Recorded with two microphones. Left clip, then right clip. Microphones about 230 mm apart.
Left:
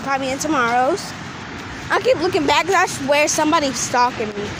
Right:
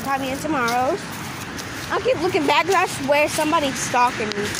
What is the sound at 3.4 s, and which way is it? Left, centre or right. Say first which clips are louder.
Speech: left 3 dB; left.